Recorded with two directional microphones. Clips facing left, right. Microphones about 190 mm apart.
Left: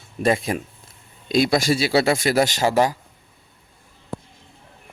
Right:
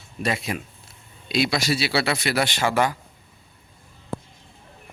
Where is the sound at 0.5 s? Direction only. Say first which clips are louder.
Left 4 dB; 45° left (ahead or behind).